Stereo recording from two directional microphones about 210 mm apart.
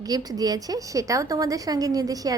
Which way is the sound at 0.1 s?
20° right (ahead or behind).